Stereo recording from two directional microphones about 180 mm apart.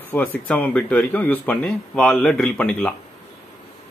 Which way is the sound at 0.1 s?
10° left (ahead or behind).